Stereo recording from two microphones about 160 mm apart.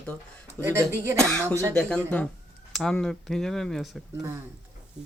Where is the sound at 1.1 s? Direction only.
5° left (ahead or behind).